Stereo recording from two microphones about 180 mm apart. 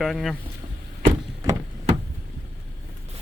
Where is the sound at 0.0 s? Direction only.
Centre (ahead or behind).